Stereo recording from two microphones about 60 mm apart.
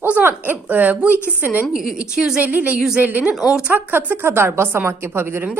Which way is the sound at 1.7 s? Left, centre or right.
Centre.